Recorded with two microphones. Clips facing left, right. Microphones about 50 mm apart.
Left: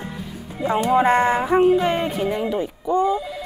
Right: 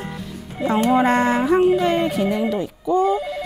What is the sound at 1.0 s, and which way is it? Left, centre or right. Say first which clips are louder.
Speech: even; centre.